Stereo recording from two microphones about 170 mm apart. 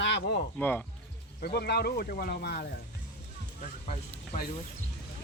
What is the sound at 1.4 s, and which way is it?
Speech, 70° left (ahead or behind).